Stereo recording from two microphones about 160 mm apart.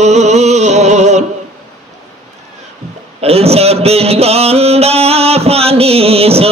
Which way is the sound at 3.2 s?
40° right (ahead or behind).